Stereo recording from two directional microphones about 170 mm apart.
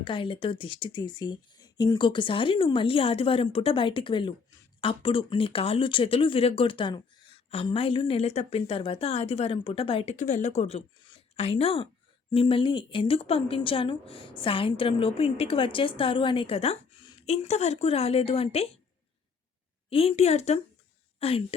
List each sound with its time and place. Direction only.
0.0 s a woman's voice: 30° left (ahead or behind)
10.2 s a woman's voice: 45° left (ahead or behind)
19.9 s a woman's voice: 35° left (ahead or behind)